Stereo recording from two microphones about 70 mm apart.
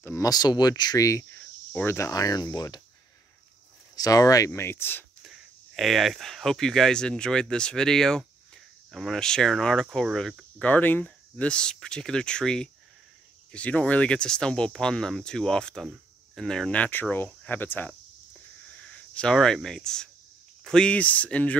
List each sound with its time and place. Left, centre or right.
0.2 s speech: left
0.9 s cricket: left
2.1 s speech: left
3.9 s speech: left
4.5 s speech: left
5.2 s speech: centre
10.6 s speech: left; by 16.7 s centre
16.7 s speech: left
18.8 s speech: centre